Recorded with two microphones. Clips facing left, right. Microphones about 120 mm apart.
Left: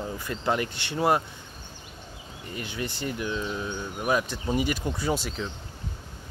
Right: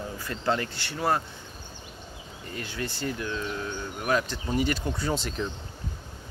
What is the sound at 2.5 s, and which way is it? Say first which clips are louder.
Speech: left 1 dB; 20° left (ahead or behind).